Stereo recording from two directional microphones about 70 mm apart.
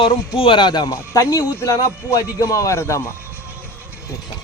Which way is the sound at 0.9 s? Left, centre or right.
Left.